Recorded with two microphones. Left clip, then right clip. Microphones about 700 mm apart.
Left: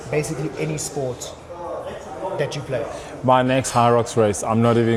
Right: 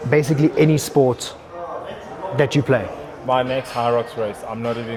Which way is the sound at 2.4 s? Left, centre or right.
Right.